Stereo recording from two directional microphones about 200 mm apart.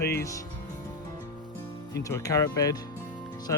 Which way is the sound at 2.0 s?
15° left (ahead or behind).